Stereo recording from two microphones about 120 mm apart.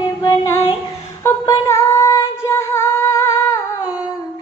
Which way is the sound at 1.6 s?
25° left (ahead or behind).